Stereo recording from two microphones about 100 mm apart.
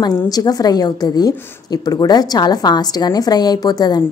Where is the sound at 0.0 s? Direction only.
40° left (ahead or behind).